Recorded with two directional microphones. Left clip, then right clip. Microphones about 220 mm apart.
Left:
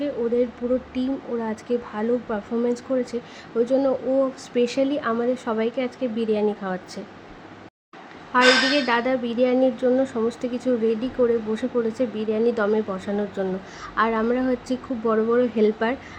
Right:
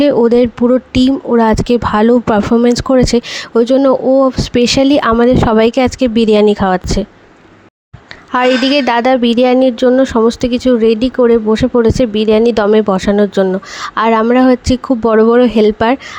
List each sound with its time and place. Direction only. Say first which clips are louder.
0.9 s speech: right 16 dB; 45° right (ahead or behind)
8.3 s a woman's voice: right 6 dB; 45° right (ahead or behind)